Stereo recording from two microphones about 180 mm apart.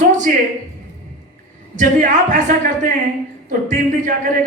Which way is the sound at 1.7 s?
45° right (ahead or behind).